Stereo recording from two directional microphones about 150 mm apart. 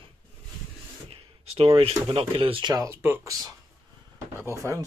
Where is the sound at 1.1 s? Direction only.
40° right (ahead or behind).